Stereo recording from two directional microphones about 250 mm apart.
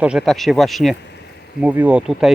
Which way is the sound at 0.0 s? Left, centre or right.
Centre.